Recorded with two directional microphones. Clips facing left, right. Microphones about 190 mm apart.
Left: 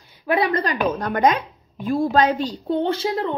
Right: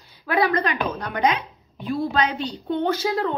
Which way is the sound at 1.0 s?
45° left (ahead or behind).